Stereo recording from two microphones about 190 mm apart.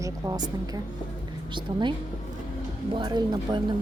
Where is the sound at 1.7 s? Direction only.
25° right (ahead or behind).